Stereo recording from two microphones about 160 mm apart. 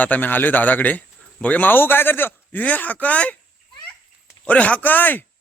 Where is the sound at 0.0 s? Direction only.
10° left (ahead or behind).